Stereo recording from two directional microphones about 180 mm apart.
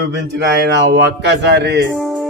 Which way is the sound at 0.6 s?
70° right (ahead or behind).